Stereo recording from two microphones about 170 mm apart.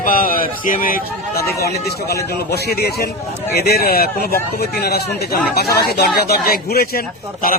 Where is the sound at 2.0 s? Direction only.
70° left (ahead or behind).